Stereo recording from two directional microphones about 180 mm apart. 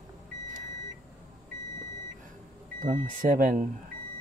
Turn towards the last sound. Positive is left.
turn(degrees=-50)  # may be behind; listen again after turning